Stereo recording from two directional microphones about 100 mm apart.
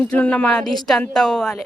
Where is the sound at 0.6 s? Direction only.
Centre (ahead or behind).